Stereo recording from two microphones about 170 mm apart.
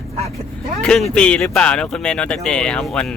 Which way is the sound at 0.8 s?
5° left (ahead or behind).